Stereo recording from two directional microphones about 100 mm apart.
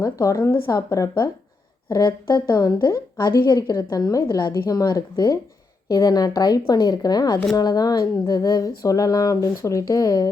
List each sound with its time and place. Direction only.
0.0 s a woman's voice: 35° left (ahead or behind)